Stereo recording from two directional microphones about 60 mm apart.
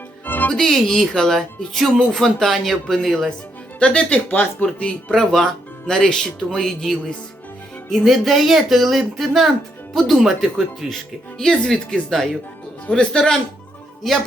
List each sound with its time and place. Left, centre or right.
0.3 s music: left
0.5 s speech: centre
3.8 s speech: centre
5.1 s speech: centre